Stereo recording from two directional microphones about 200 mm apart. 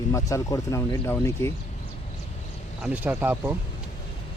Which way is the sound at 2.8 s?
5° right (ahead or behind).